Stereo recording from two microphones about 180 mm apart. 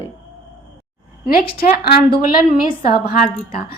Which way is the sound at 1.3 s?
55° left (ahead or behind).